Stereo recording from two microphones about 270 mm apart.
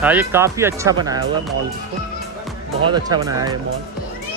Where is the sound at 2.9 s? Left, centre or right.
Centre.